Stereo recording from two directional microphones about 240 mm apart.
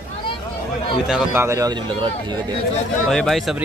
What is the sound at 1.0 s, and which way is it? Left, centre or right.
A man's voice, centre.